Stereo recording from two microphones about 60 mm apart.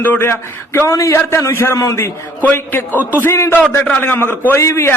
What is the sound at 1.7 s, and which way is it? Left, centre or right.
Speech, left.